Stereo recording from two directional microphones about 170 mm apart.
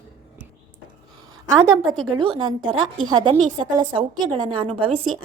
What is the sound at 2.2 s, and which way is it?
A woman's voice, 25° right (ahead or behind).